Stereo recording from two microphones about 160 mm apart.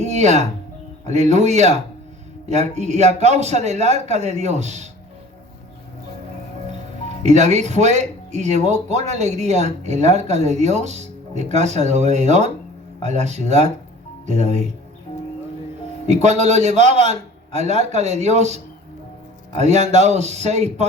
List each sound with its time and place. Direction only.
0.0 s speech: 45° right (ahead or behind)
7.3 s speech: 45° right (ahead or behind)
16.0 s speech: 45° right (ahead or behind)